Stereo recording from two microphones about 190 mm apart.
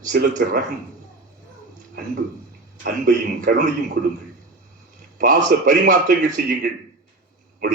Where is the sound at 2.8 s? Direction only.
60° right (ahead or behind).